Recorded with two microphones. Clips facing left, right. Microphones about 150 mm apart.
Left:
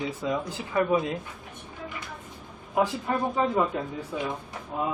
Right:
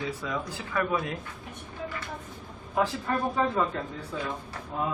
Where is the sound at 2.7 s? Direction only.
20° left (ahead or behind).